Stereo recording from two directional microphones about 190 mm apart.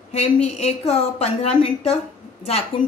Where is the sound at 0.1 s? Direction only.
35° left (ahead or behind).